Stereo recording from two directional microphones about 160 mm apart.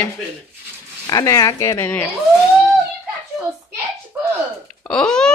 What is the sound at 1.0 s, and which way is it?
Speech, 25° left (ahead or behind).